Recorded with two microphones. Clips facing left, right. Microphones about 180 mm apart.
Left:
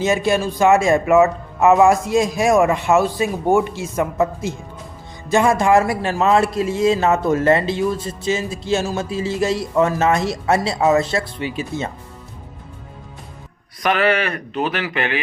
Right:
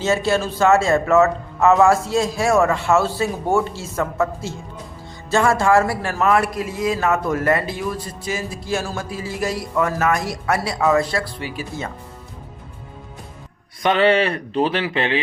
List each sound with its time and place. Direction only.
0.0 s a man's voice: 15° left (ahead or behind)
13.8 s speech: 25° right (ahead or behind)